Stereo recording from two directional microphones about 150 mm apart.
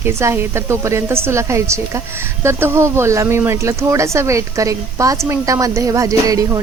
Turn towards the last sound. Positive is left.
turn(degrees=-20)  # may be behind; listen again after turning